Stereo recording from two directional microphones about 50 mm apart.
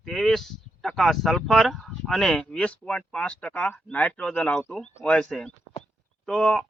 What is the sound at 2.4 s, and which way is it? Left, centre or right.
Speech, left.